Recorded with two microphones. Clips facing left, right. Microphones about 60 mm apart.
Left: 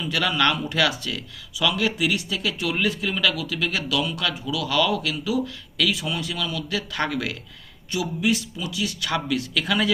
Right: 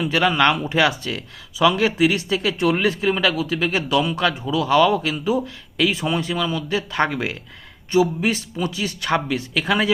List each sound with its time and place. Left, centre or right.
0.1 s speech: right